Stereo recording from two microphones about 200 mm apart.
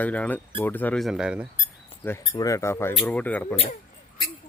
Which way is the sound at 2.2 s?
20° left (ahead or behind).